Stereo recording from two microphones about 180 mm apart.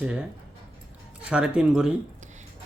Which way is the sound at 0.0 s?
5° right (ahead or behind).